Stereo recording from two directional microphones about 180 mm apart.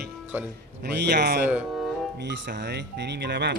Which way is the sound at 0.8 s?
65° right (ahead or behind).